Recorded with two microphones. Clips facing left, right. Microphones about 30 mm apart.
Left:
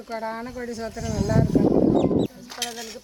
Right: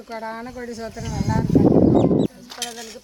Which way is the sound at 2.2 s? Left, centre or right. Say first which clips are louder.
Right 2 dB; centre.